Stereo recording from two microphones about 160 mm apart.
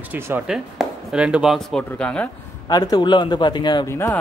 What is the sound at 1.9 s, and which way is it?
Speech, 5° left (ahead or behind).